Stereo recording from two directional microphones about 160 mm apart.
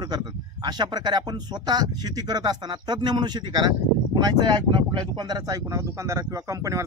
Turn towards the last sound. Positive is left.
turn(degrees=-20)  # may be behind; listen again after turning